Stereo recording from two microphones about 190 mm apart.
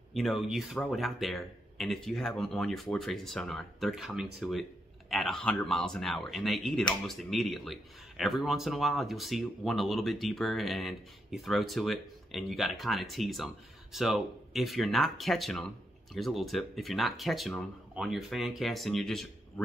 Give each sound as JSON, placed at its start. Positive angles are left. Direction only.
{"t": 0.1, "sound": "speech", "side_deg": 0}